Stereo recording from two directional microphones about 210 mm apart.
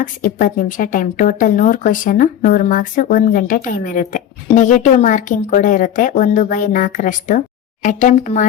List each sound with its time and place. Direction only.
0.0 s a woman's voice: 40° left (ahead or behind)